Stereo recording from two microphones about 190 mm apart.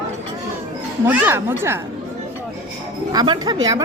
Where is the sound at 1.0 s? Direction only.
10° right (ahead or behind).